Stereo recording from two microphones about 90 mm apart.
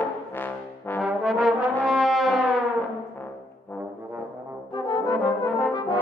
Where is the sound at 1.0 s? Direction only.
Centre (ahead or behind).